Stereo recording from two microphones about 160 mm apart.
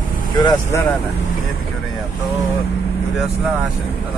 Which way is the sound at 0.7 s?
15° left (ahead or behind).